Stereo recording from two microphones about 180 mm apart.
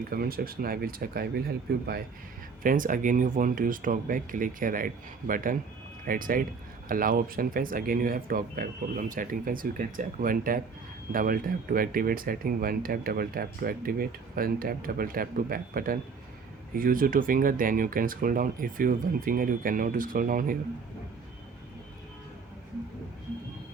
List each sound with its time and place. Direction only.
0.1 s speech: 55° right (ahead or behind)